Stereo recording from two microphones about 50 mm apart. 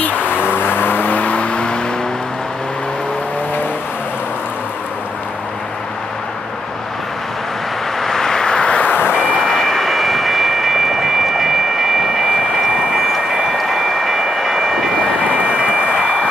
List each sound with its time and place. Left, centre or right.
0.0 s vehicle: left; by 1.8 s centre
8.0 s vehicle: centre
8.8 s vehicle: left
9.4 s vehicle: centre
12.9 s train: centre
15.2 s a sound: right